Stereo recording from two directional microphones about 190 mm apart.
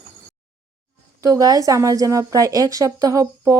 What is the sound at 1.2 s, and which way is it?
A woman's voice, 20° right (ahead or behind).